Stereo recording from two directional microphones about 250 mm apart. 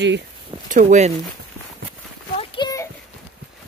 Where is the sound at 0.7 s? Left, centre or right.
Right.